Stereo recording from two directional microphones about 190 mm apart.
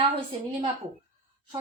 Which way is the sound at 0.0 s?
30° right (ahead or behind).